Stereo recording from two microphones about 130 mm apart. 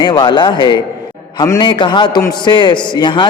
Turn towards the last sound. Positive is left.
turn(degrees=35)  # may be behind; listen again after turning